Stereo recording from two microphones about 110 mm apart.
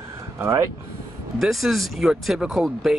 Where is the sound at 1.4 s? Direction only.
Centre (ahead or behind).